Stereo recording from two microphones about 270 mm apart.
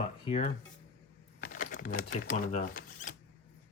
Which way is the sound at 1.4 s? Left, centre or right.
Left.